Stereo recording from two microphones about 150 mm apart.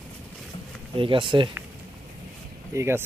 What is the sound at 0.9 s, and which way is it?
Speech, 35° right (ahead or behind).